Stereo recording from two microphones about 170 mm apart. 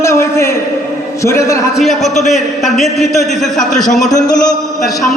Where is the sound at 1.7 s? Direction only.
Centre (ahead or behind).